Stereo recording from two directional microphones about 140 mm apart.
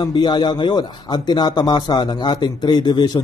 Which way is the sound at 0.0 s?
30° left (ahead or behind).